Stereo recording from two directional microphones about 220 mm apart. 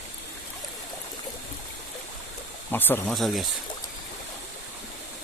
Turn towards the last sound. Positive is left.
turn(degrees=0)  # may be behind; listen again after turning